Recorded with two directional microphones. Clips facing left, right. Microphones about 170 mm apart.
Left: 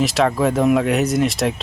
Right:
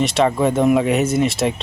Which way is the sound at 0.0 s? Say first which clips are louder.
Right 1 dB; centre (ahead or behind).